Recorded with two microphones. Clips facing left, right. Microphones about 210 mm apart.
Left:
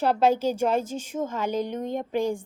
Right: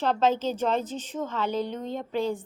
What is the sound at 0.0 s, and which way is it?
A woman's voice, 10° left (ahead or behind).